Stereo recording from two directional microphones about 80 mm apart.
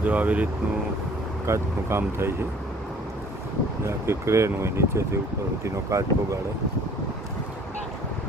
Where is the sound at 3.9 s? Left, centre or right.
Right.